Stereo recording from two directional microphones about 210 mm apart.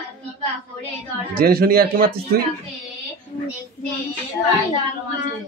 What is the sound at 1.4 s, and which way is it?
Speech, 45° right (ahead or behind).